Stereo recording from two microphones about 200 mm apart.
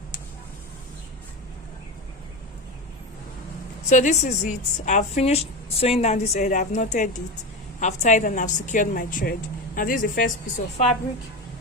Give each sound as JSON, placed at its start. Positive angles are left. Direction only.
{"t": 3.8, "sound": "a woman's voice", "side_deg": 40}